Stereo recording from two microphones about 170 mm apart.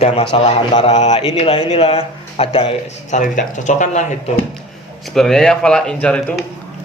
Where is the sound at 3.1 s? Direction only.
50° left (ahead or behind).